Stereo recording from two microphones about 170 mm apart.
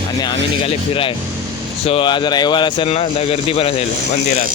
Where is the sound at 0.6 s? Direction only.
35° left (ahead or behind).